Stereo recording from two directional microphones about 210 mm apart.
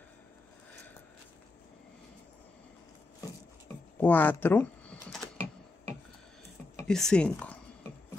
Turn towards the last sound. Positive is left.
turn(degrees=5)  # may be behind; listen again after turning